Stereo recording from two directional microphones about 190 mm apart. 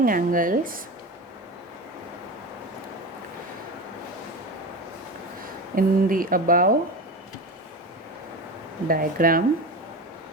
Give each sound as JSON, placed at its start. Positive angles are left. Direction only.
{"t": 0.0, "sound": "speech", "side_deg": -45}
{"t": 5.7, "sound": "speech", "side_deg": -45}
{"t": 8.9, "sound": "speech", "side_deg": -50}